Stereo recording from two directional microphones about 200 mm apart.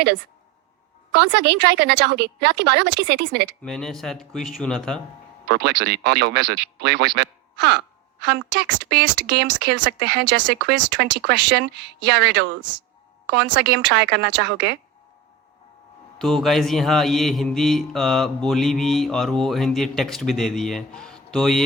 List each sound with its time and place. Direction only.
1.1 s speech: 55° right (ahead or behind)
3.6 s speech: centre (ahead or behind)
5.5 s speech: 55° right (ahead or behind)
16.1 s speech: centre (ahead or behind)